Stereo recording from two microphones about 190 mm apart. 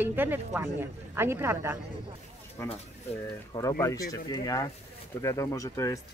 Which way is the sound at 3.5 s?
15° left (ahead or behind).